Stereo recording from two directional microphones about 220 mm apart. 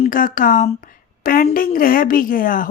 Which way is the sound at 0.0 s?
40° left (ahead or behind).